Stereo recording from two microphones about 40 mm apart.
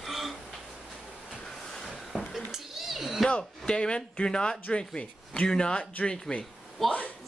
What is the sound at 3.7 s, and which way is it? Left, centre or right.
Speech, left.